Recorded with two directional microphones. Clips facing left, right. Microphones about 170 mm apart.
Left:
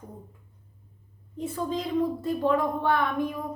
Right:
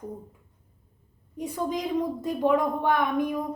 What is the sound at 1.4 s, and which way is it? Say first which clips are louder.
A woman's voice: right 1 dB; 15° right (ahead or behind).